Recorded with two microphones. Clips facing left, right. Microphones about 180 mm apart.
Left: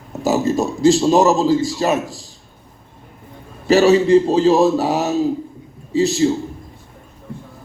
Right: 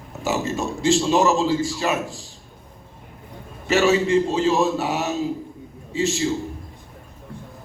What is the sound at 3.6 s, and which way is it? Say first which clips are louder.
A man's voice: left 6 dB; 35° left (ahead or behind).